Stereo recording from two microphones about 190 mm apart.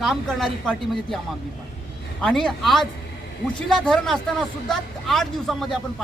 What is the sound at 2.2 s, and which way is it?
A man's voice, centre (ahead or behind).